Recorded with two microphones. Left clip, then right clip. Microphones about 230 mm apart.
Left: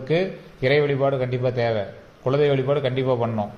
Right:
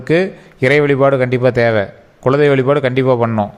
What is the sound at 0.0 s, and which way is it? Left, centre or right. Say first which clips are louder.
A man's voice: right 8 dB; right.